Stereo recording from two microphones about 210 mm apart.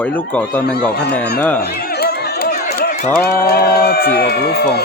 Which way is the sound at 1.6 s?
50° left (ahead or behind).